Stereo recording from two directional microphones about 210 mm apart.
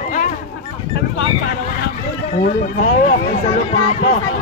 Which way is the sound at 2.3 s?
35° left (ahead or behind).